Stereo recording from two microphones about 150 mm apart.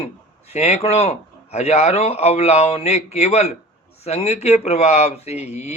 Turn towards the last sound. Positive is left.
turn(degrees=45)  # may be behind; listen again after turning